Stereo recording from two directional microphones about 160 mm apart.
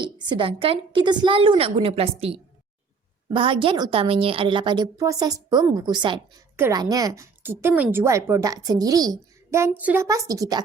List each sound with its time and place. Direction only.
0.0 s a woman's voice: 30° right (ahead or behind)